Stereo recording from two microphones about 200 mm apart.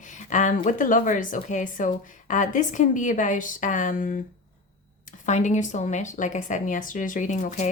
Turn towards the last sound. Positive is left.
turn(degrees=35)  # may be behind; listen again after turning